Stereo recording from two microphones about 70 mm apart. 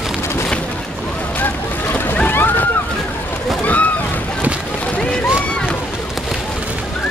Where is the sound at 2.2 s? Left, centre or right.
Left.